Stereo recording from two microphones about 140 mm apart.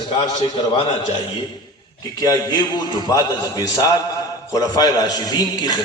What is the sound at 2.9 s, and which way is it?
A man's voice, 30° left (ahead or behind).